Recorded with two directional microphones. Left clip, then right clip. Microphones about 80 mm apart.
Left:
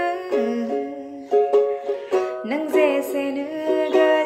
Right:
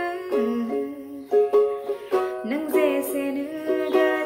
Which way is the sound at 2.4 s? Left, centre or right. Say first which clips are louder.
Left 5 dB; right.